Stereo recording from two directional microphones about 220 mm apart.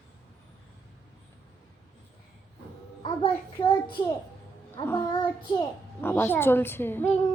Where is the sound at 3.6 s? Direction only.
20° left (ahead or behind).